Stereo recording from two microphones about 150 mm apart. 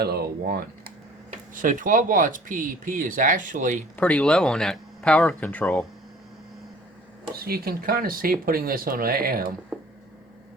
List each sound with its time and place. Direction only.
0.0 s speech: 90° right
1.3 s speech: 60° right (ahead or behind)
3.9 s speech: 10° left (ahead or behind)
7.3 s speech: 90° right
9.7 s a sound: 5° right (ahead or behind)